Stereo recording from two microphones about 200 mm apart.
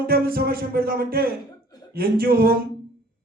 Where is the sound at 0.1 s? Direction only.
50° right (ahead or behind).